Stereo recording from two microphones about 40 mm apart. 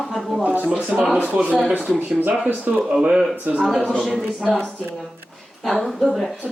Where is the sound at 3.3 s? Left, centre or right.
Right.